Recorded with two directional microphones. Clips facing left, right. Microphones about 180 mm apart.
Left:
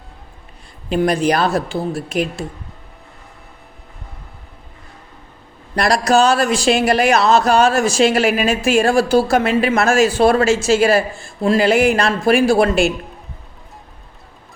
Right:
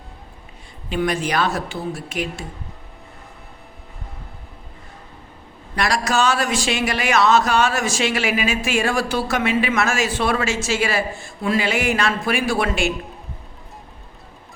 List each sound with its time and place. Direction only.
0.9 s speech: 35° left (ahead or behind)
5.7 s speech: 35° left (ahead or behind)